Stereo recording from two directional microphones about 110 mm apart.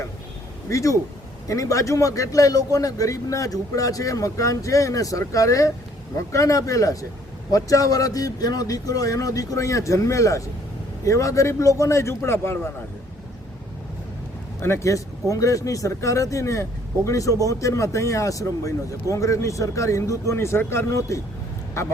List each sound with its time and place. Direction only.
0.7 s speech: 30° left (ahead or behind)
14.6 s speech: 25° left (ahead or behind)